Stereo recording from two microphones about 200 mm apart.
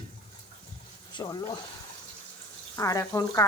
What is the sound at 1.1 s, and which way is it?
Speech, 20° left (ahead or behind).